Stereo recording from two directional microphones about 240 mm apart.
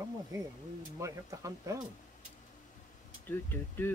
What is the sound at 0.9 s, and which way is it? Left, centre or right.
Speech, centre.